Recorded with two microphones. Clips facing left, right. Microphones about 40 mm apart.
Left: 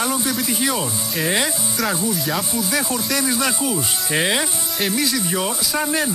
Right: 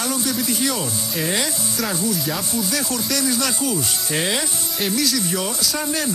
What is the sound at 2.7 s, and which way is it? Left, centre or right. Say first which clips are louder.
Speech: left 2 dB; centre.